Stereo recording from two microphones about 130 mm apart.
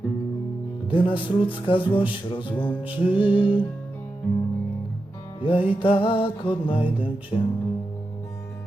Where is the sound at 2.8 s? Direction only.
45° left (ahead or behind).